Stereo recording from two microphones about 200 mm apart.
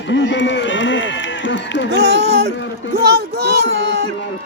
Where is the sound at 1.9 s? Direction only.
60° right (ahead or behind).